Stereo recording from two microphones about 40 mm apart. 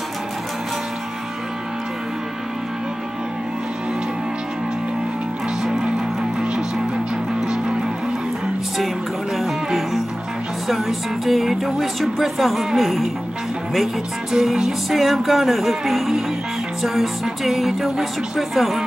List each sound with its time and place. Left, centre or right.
5.6 s music: centre
7.3 s music: centre
9.4 s music: centre
10.7 s speech: centre
14.3 s speech: centre